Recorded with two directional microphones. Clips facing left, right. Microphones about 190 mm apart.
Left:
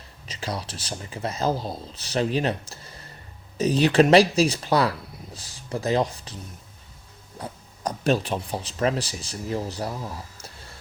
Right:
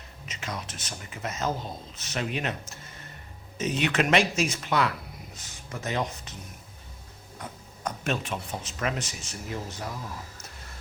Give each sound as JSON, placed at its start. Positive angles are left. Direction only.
{"t": 0.3, "sound": "speech", "side_deg": 35}
{"t": 7.3, "sound": "speech", "side_deg": 35}